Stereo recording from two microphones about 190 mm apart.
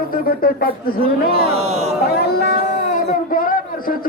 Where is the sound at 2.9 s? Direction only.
45° left (ahead or behind).